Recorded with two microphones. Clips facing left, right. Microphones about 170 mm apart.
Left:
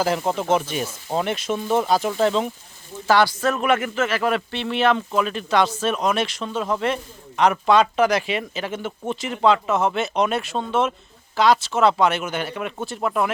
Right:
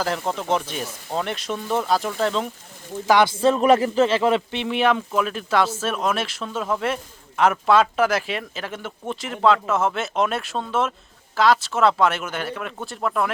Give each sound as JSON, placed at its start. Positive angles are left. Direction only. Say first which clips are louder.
{"t": 0.2, "sound": "speech", "louder": "left 3 dB", "side_deg": 10}
{"t": 3.1, "sound": "speech", "louder": "even", "side_deg": -15}
{"t": 3.3, "sound": "speech", "louder": "right 4 dB", "side_deg": -30}